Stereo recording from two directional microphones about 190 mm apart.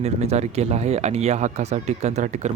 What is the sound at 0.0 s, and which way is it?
A man's voice, 35° right (ahead or behind).